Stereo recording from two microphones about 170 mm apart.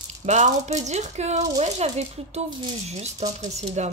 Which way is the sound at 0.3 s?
45° right (ahead or behind).